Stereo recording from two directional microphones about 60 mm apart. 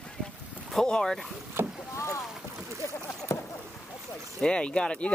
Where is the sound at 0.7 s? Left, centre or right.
Centre.